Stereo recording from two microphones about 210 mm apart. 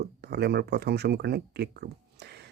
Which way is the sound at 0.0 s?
50° right (ahead or behind).